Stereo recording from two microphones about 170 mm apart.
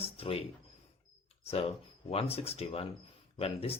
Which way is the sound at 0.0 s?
35° left (ahead or behind).